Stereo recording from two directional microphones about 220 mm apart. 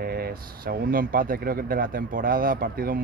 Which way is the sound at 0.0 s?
45° right (ahead or behind).